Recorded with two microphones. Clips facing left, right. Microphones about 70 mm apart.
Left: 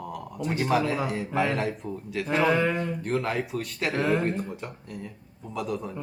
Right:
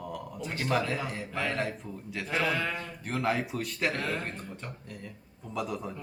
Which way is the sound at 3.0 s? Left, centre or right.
Centre.